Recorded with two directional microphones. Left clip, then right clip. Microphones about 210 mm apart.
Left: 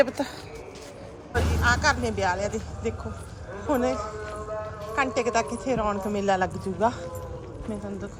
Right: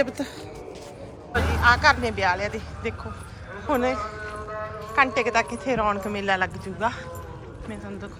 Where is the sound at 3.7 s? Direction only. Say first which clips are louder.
Right 2 dB; 15° left (ahead or behind).